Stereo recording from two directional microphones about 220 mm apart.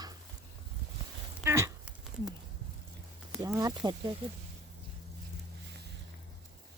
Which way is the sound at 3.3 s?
10° right (ahead or behind).